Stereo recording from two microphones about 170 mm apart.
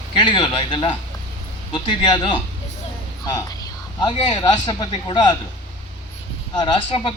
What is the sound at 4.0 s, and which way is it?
A man's voice, 25° left (ahead or behind).